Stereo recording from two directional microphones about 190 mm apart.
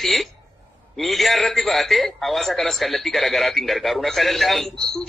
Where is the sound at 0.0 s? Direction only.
Centre (ahead or behind).